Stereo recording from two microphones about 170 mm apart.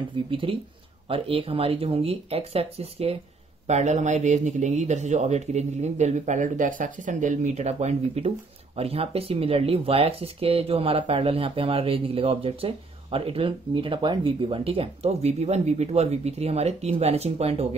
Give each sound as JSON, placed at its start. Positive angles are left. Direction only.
{"t": 0.3, "sound": "speech", "side_deg": -30}